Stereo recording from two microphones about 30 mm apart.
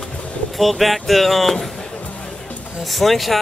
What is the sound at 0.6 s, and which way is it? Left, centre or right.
Speech, centre.